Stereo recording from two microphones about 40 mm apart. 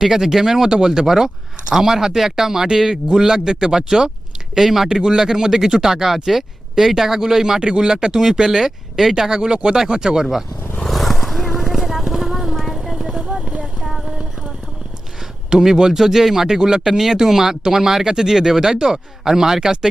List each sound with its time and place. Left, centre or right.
0.0 s speech: centre
9.3 s speech: right
10.8 s vehicle: centre
12.5 s clip-clop: centre
13.4 s clip-clop: right
13.8 s a sound: centre
15.4 s speech: centre